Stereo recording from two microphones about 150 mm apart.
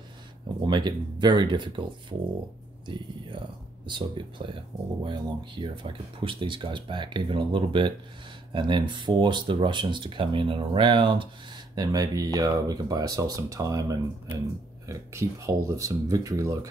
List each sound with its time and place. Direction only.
0.7 s speech: 30° right (ahead or behind)
3.8 s speech: 30° right (ahead or behind)